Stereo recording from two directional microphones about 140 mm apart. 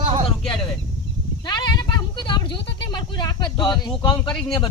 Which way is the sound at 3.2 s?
30° left (ahead or behind).